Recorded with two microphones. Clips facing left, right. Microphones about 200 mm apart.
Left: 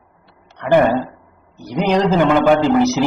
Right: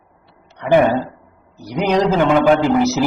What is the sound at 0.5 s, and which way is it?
Speech, 15° right (ahead or behind).